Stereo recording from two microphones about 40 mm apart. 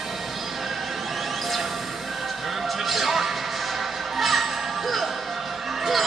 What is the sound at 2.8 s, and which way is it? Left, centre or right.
Music, centre.